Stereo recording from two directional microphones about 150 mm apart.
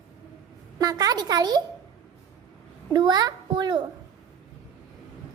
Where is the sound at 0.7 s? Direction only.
25° right (ahead or behind).